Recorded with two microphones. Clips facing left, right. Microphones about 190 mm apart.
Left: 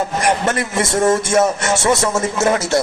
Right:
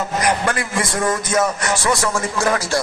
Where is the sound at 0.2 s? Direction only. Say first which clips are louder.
Left 2 dB; 25° left (ahead or behind).